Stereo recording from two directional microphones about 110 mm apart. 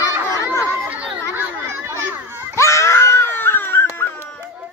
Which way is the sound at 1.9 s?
25° right (ahead or behind).